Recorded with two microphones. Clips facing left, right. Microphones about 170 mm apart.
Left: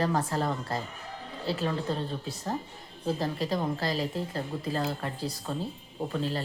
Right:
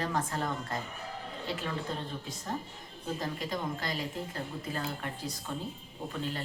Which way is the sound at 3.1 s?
35° left (ahead or behind).